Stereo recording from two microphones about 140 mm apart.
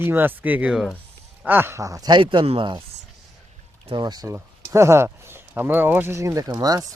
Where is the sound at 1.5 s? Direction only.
15° right (ahead or behind); by 2.8 s 35° right (ahead or behind).